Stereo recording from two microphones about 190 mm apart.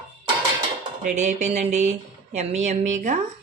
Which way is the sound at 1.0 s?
40° right (ahead or behind).